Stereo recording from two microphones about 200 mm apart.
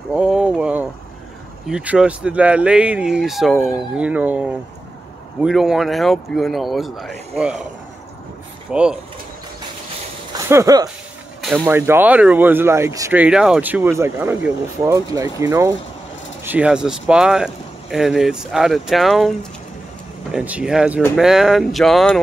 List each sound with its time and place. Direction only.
0.1 s a sound: 5° right (ahead or behind)
1.7 s speech: 5° right (ahead or behind)
8.7 s speech: 5° right (ahead or behind)
10.3 s speech: 15° right (ahead or behind); by 22.2 s centre (ahead or behind)